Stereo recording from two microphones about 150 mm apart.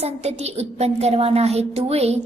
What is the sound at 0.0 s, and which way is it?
A woman's voice, 45° right (ahead or behind).